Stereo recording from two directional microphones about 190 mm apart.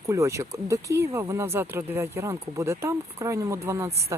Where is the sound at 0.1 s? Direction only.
15° right (ahead or behind).